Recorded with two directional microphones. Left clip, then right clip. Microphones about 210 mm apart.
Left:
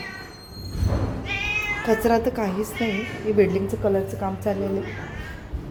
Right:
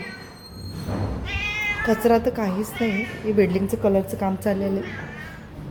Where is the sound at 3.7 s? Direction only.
15° right (ahead or behind).